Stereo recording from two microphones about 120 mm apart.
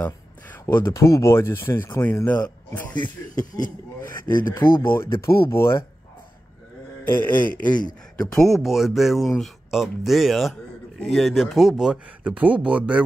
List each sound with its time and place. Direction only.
0.0 s speech: 15° left (ahead or behind)
2.7 s a sound: 15° left (ahead or behind)
3.3 s speech: 90° left
4.8 s speech: 20° left (ahead or behind)
7.2 s a sound: 15° left (ahead or behind)
8.2 s speech: 5° left (ahead or behind)